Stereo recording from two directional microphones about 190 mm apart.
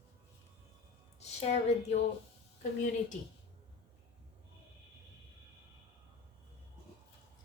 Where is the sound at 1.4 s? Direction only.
35° left (ahead or behind).